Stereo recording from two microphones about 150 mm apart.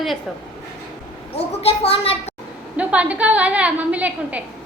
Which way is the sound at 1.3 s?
40° left (ahead or behind).